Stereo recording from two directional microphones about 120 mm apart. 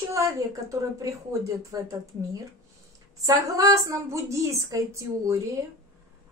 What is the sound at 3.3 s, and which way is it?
Speech, 30° right (ahead or behind).